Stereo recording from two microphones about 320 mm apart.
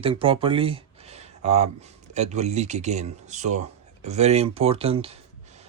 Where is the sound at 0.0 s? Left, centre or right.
Centre.